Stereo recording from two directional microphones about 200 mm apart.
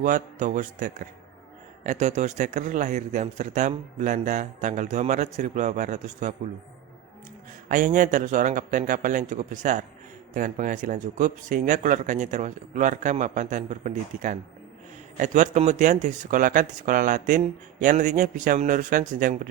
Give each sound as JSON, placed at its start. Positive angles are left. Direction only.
{"t": 0.0, "sound": "speech", "side_deg": -40}
{"t": 7.7, "sound": "speech", "side_deg": -40}